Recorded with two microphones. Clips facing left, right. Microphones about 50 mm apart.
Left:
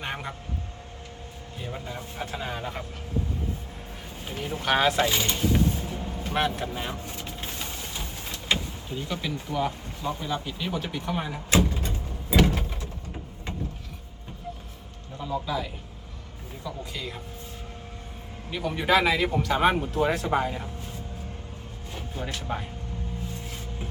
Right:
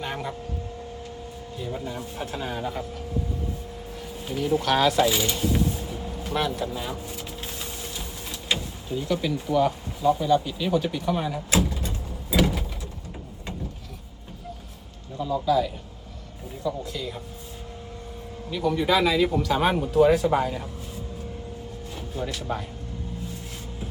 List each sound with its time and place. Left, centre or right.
0.0 s vehicle: centre
1.5 s speech: centre
1.8 s speech: centre
4.2 s speech: centre
5.3 s vehicle: centre
6.3 s speech: left
6.9 s a sound: centre
8.4 s speech: centre
11.5 s a sound: centre
15.2 s speech: centre
18.5 s speech: left
19.4 s speech: centre
21.9 s vehicle: centre
22.4 s speech: centre